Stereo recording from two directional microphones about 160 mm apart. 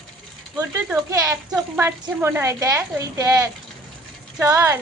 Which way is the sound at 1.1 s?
20° right (ahead or behind).